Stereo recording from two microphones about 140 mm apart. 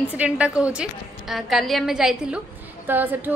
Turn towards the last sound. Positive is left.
turn(degrees=-15)  # may be behind; listen again after turning